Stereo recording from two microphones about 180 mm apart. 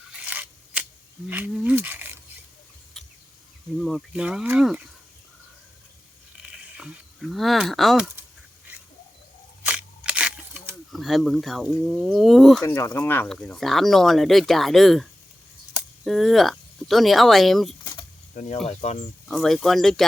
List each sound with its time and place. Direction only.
0.1 s scissors: 5° right (ahead or behind)
1.3 s speech: 10° right (ahead or behind)
3.0 s a sound: centre (ahead or behind)
3.8 s speech: 5° right (ahead or behind)
6.4 s a sound: 5° right (ahead or behind)
9.6 s camera: 5° right (ahead or behind)
12.6 s speech: 15° left (ahead or behind)
16.0 s speech: centre (ahead or behind)
18.3 s speech: 40° left (ahead or behind)
19.3 s speech: centre (ahead or behind)